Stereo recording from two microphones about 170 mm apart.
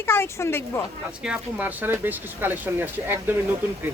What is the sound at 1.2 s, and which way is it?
Speech, 10° right (ahead or behind).